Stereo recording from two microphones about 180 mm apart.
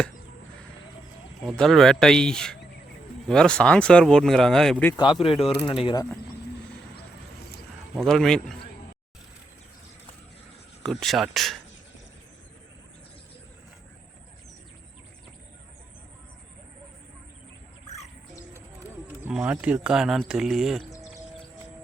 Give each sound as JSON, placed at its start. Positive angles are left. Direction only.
{"t": 1.4, "sound": "speech", "side_deg": 5}
{"t": 5.2, "sound": "speech", "side_deg": 30}
{"t": 7.9, "sound": "speech", "side_deg": 0}
{"t": 10.8, "sound": "speech", "side_deg": 0}
{"t": 19.2, "sound": "speech", "side_deg": -5}